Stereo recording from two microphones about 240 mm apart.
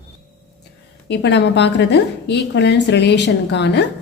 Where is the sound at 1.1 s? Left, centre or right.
Left.